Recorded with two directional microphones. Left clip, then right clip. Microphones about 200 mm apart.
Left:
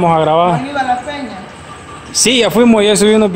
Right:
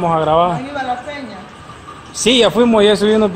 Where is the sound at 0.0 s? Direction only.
20° left (ahead or behind).